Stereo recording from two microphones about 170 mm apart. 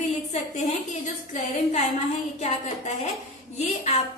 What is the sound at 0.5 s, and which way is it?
A woman's voice, 45° left (ahead or behind).